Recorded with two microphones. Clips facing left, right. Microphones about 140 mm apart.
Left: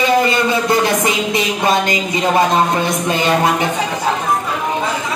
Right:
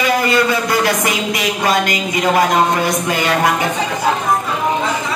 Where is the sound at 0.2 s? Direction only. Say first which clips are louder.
Even; 25° left (ahead or behind).